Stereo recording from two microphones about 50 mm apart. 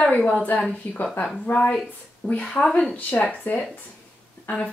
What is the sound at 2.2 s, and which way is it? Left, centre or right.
Speech, left.